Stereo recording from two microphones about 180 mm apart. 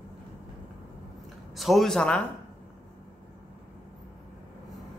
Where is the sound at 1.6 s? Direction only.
Centre (ahead or behind).